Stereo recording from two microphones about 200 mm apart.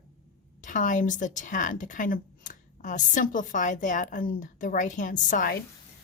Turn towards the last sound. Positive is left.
turn(degrees=45)  # may be behind; listen again after turning